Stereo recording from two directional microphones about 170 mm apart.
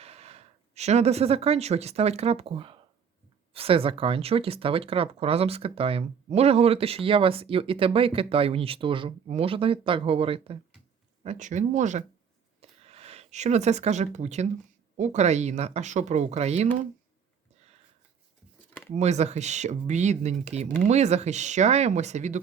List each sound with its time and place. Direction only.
0.0 s speech: 40° right (ahead or behind)
12.5 s a sound: 35° right (ahead or behind)
14.9 s speech: 45° right (ahead or behind)
18.9 s speech: 40° right (ahead or behind)